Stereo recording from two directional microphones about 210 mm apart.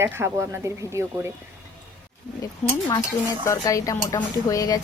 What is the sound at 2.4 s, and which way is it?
Speech, 15° left (ahead or behind).